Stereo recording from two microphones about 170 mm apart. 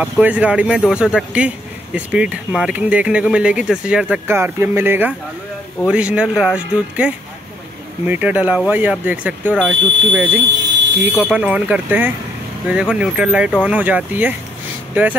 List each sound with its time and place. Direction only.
0.0 s speech: 10° right (ahead or behind)